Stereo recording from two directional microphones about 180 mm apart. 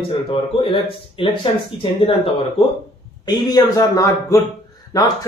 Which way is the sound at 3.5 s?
20° left (ahead or behind).